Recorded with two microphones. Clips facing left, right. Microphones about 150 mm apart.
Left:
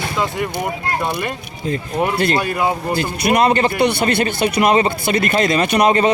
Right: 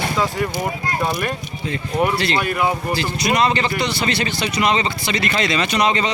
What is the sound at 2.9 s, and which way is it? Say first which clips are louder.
A man's voice: left 3 dB; 55° left (ahead or behind).